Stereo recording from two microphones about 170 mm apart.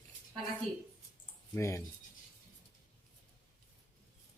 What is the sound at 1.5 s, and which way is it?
Speech, 15° left (ahead or behind).